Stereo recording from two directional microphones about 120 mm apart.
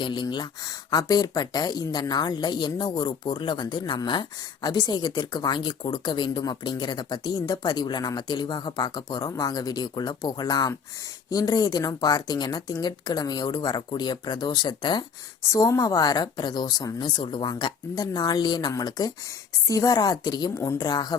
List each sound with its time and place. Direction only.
0.0 s speech: 40° left (ahead or behind)